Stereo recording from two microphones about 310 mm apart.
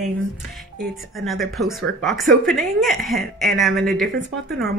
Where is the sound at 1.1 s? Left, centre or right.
Centre.